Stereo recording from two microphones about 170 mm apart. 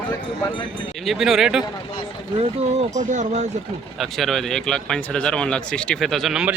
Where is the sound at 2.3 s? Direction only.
40° right (ahead or behind).